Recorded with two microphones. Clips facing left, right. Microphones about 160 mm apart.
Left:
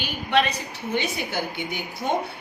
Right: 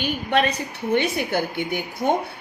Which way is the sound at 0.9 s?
55° right (ahead or behind).